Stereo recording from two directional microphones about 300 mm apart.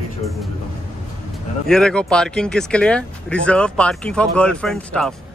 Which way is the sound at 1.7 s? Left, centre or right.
Centre.